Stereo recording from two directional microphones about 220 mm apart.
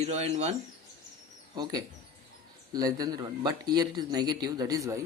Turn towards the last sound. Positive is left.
turn(degrees=-15)  # may be behind; listen again after turning